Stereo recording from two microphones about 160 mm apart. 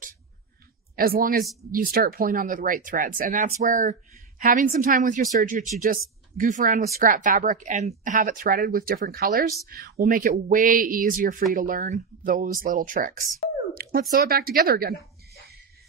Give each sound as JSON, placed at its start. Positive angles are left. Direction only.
{"t": 0.9, "sound": "a woman's voice", "side_deg": -65}
{"t": 13.8, "sound": "a sound", "side_deg": -70}
{"t": 14.1, "sound": "a woman's voice", "side_deg": -65}